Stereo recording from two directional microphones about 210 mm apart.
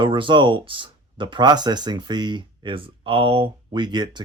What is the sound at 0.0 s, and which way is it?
Speech, 25° right (ahead or behind).